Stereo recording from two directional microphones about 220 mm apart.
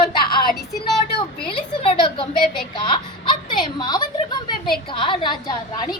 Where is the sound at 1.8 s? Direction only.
25° left (ahead or behind).